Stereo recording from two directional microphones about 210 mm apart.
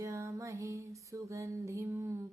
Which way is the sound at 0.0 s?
15° right (ahead or behind).